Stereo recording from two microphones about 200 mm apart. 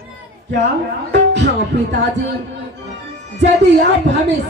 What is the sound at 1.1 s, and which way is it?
Music, 60° right (ahead or behind).